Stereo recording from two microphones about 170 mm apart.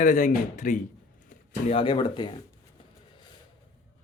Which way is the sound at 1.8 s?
25° left (ahead or behind).